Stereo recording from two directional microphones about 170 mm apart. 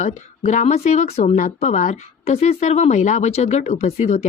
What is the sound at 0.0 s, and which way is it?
Speech, 45° left (ahead or behind).